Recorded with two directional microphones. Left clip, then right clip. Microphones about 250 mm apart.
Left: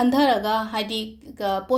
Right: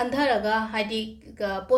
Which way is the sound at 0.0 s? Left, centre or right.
Left.